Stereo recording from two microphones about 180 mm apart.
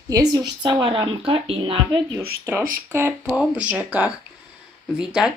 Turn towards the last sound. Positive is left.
turn(degrees=-5)  # may be behind; listen again after turning